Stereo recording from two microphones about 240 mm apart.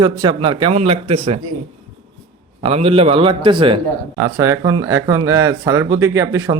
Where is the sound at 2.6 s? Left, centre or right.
Right.